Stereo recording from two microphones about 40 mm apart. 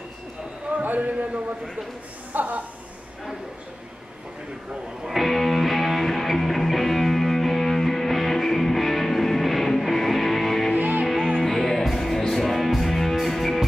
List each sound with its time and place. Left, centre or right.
0.7 s a man's voice: right
5.0 s music: centre
10.8 s music: right
11.1 s music: centre